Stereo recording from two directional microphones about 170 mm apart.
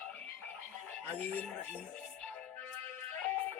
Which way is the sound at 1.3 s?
10° left (ahead or behind).